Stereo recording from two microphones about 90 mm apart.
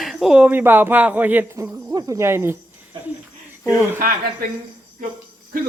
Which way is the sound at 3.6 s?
20° right (ahead or behind).